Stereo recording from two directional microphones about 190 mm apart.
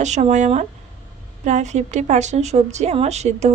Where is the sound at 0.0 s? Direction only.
40° right (ahead or behind).